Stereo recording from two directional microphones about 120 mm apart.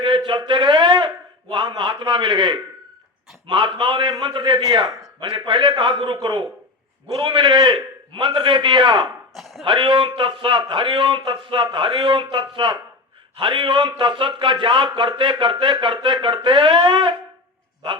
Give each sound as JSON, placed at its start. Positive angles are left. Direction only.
{"t": 0.3, "sound": "speech", "side_deg": -45}
{"t": 7.2, "sound": "speech", "side_deg": -40}
{"t": 9.3, "sound": "speech", "side_deg": 0}
{"t": 9.6, "sound": "speech", "side_deg": -45}